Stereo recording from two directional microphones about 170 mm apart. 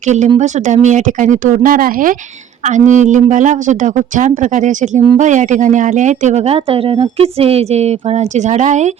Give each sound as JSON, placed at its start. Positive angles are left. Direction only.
{"t": 0.0, "sound": "speech", "side_deg": -45}